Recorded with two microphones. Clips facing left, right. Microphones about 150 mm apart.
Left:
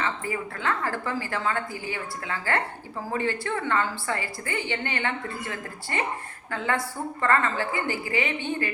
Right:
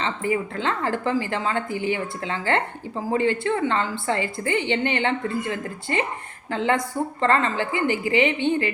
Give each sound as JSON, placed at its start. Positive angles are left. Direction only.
{"t": 0.0, "sound": "a woman's voice", "side_deg": -20}
{"t": 6.5, "sound": "a woman's voice", "side_deg": -20}